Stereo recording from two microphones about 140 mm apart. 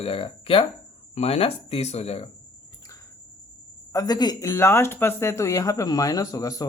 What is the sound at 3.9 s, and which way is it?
Speech, 30° left (ahead or behind).